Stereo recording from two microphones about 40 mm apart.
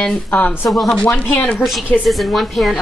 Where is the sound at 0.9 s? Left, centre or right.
Left.